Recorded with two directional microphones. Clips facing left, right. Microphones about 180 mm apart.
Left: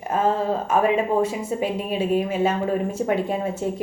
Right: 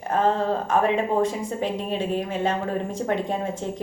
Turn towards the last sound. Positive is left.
turn(degrees=5)  # may be behind; listen again after turning